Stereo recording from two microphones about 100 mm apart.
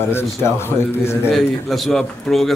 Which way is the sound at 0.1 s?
25° left (ahead or behind).